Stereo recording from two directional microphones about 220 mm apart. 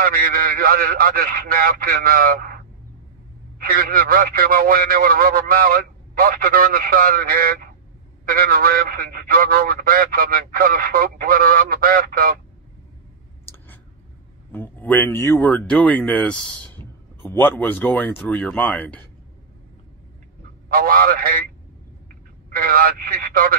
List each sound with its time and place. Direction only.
0.0 s a man's voice: 40° right (ahead or behind)
14.5 s speech: 10° left (ahead or behind)
20.6 s speech: 40° right (ahead or behind)
22.5 s speech: 40° right (ahead or behind)